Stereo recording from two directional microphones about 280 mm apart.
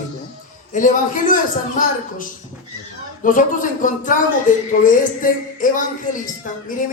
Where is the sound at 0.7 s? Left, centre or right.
Left.